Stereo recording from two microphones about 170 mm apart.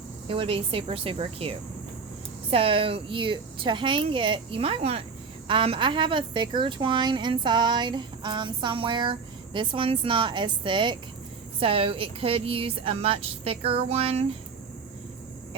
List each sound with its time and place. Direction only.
0.3 s a woman's voice: 35° right (ahead or behind)